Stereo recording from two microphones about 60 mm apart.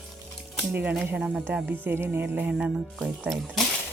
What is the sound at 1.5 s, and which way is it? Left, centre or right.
Speech, right.